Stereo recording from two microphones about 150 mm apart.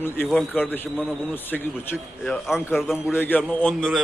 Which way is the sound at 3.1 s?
10° left (ahead or behind).